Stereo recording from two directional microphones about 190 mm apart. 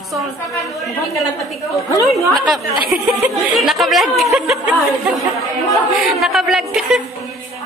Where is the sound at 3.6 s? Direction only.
Centre (ahead or behind).